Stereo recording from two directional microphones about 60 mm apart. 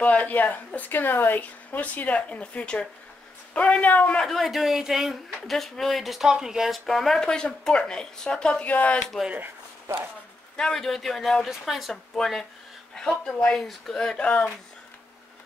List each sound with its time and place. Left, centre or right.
0.0 s speech: left
4.3 s a woman's voice: centre; by 9.0 s left
10.5 s a woman's voice: centre
14.2 s speech: left